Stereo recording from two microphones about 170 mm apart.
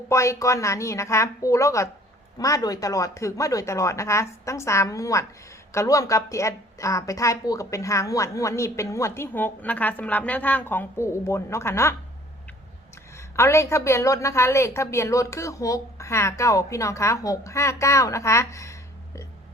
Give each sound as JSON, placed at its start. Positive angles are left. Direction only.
{"t": 0.1, "sound": "a woman's voice", "side_deg": 15}
{"t": 13.1, "sound": "a woman's voice", "side_deg": 15}